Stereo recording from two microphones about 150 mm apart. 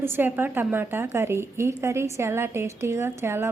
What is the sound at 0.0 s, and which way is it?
A woman's voice, 15° right (ahead or behind).